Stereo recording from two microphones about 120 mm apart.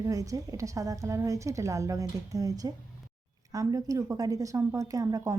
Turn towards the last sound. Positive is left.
turn(degrees=-30)  # may be behind; listen again after turning